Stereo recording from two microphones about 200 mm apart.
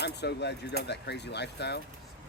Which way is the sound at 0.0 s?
55° left (ahead or behind).